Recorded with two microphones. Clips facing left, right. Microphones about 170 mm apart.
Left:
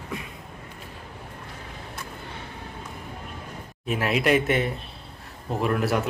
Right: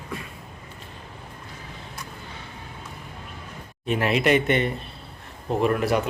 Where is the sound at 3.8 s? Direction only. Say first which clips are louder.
Right 2 dB; 5° left (ahead or behind).